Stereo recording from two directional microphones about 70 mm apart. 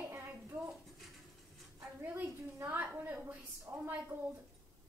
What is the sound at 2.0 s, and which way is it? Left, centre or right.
A woman's voice, right.